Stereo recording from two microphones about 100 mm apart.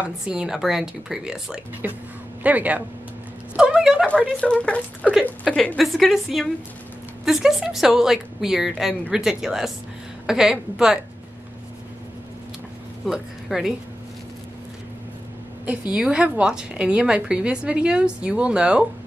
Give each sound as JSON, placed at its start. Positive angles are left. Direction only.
{"t": 0.0, "sound": "a woman's voice", "side_deg": -10}
{"t": 1.8, "sound": "a woman's voice", "side_deg": -15}
{"t": 3.5, "sound": "a sound", "side_deg": -10}
{"t": 4.4, "sound": "speech", "side_deg": 10}
{"t": 5.8, "sound": "a woman's voice", "side_deg": 0}
{"t": 13.0, "sound": "speech", "side_deg": -5}
{"t": 15.6, "sound": "a woman's voice", "side_deg": -15}